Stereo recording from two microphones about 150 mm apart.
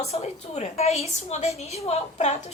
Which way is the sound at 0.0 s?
45° left (ahead or behind).